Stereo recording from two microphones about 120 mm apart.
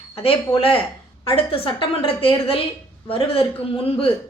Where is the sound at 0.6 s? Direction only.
50° left (ahead or behind).